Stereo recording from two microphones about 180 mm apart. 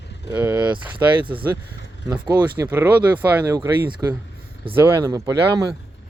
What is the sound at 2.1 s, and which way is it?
Speech, 25° right (ahead or behind).